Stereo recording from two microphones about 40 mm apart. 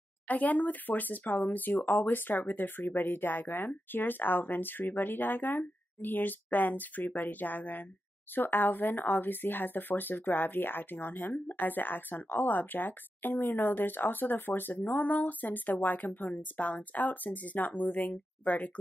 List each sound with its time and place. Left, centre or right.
0.3 s speech: left
8.4 s speech: left
14.7 s speech: left